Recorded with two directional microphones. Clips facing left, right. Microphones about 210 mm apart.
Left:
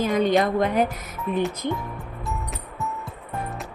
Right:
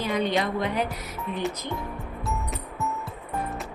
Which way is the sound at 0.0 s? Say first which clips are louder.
Left 5 dB; 45° left (ahead or behind).